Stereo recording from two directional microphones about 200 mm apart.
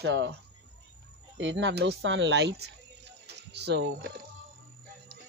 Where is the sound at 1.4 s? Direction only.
65° right (ahead or behind).